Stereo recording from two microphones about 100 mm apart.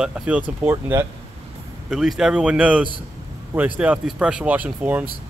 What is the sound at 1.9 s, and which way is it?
Speech, 5° right (ahead or behind).